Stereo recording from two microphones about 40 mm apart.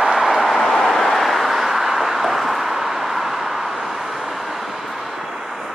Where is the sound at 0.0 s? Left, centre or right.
Centre.